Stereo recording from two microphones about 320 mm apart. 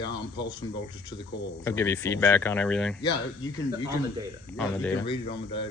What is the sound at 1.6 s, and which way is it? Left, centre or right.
Speech, centre.